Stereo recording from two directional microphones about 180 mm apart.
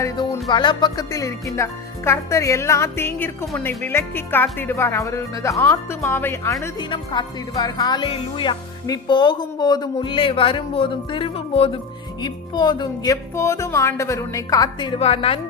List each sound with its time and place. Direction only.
0.5 s speech: 25° left (ahead or behind)